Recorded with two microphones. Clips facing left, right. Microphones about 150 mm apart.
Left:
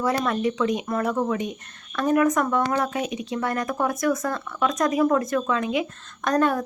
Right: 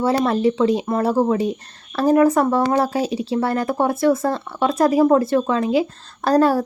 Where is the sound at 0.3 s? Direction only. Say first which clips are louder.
Right 6 dB; 30° right (ahead or behind).